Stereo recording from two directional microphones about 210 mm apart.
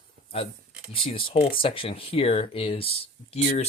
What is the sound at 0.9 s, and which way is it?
Speech, 25° left (ahead or behind).